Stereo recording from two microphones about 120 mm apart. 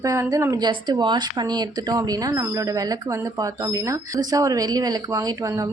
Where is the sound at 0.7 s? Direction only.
40° right (ahead or behind).